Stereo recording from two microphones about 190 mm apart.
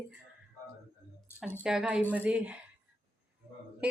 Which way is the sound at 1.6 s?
5° right (ahead or behind).